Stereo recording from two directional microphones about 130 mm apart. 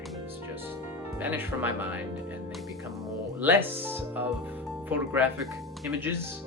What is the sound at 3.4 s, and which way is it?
Speech, 15° right (ahead or behind).